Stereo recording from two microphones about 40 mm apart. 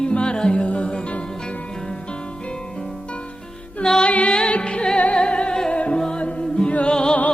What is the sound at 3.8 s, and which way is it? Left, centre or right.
Music, left.